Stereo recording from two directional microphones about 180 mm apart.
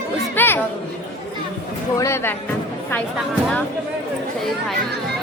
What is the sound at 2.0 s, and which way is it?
Speech, 15° left (ahead or behind).